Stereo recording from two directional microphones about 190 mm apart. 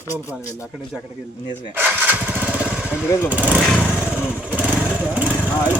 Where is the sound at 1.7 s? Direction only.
10° right (ahead or behind).